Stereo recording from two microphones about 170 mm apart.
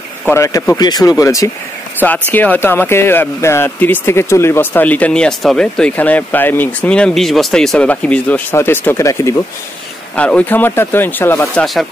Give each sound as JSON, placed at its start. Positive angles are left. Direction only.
{"t": 0.3, "sound": "speech", "side_deg": 15}
{"t": 10.1, "sound": "speech", "side_deg": 5}
{"t": 11.5, "sound": "speech", "side_deg": 0}